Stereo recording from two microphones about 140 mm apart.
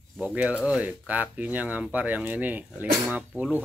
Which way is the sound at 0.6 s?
10° right (ahead or behind).